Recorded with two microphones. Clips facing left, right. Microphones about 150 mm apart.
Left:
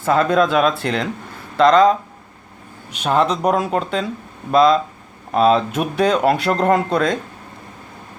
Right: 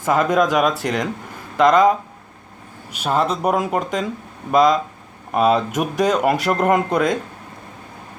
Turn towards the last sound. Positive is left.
turn(degrees=-15)  # may be behind; listen again after turning